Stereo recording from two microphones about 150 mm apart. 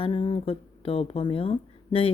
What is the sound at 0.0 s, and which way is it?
Speech, 35° left (ahead or behind).